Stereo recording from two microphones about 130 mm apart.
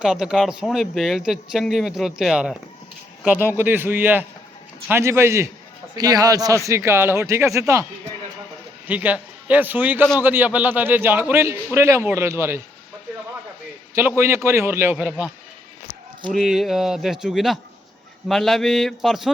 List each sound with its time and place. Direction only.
0.0 s speech: 5° right (ahead or behind)
3.4 s a man's voice: 15° right (ahead or behind)
8.9 s a man's voice: 10° right (ahead or behind)
14.2 s speech: 20° right (ahead or behind)
16.3 s speech: centre (ahead or behind)